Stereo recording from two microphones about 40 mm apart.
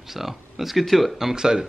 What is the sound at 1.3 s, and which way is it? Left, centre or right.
Speech, centre.